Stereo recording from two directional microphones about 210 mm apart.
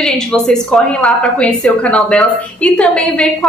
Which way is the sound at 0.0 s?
5° left (ahead or behind).